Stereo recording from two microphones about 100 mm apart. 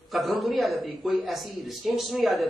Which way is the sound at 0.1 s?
Centre (ahead or behind).